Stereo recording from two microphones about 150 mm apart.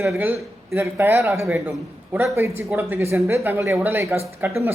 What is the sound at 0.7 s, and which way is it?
A man's voice, 15° right (ahead or behind).